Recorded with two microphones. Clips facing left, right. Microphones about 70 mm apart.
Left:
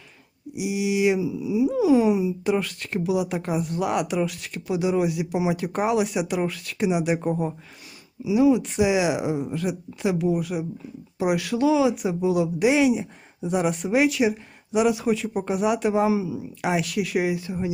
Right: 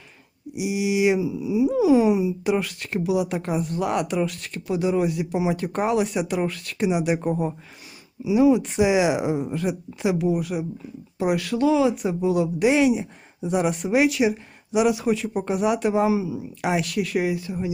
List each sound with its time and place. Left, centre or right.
0.5 s speech: right
1.7 s speech: centre
8.2 s speech: right
10.2 s speech: centre
11.2 s speech: centre
17.1 s speech: centre